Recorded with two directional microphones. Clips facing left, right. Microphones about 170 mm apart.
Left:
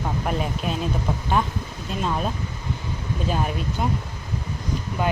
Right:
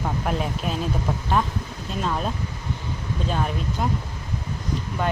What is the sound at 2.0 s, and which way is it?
Speech, 5° left (ahead or behind).